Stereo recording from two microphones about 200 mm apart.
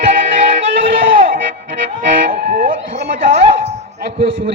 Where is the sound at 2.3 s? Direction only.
45° right (ahead or behind).